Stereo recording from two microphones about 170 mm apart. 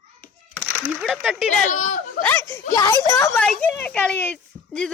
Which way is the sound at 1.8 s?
45° left (ahead or behind).